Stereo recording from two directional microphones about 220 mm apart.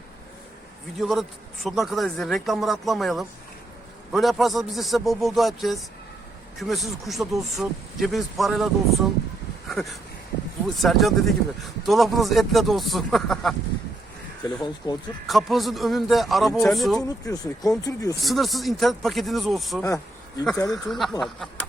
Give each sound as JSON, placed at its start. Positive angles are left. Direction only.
{"t": 0.9, "sound": "speech", "side_deg": 0}
{"t": 9.6, "sound": "a sound", "side_deg": 0}
{"t": 10.8, "sound": "speech", "side_deg": 0}
{"t": 14.8, "sound": "speech", "side_deg": 15}
{"t": 15.3, "sound": "speech", "side_deg": 0}
{"t": 17.0, "sound": "speech", "side_deg": 15}
{"t": 18.2, "sound": "speech", "side_deg": 0}